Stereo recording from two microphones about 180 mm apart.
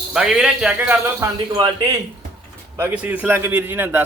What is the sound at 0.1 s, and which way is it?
Speech, 5° right (ahead or behind).